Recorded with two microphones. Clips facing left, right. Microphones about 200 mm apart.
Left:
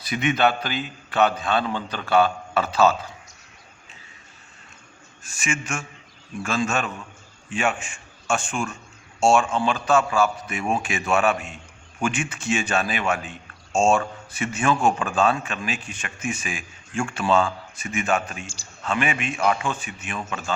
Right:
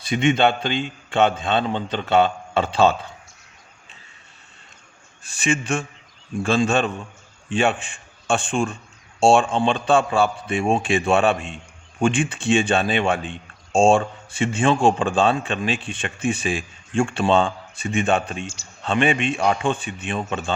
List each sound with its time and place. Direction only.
0.0 s a man's voice: 25° right (ahead or behind)
5.2 s a man's voice: 35° right (ahead or behind)
18.4 s speech: 35° left (ahead or behind)
18.8 s a man's voice: 30° right (ahead or behind)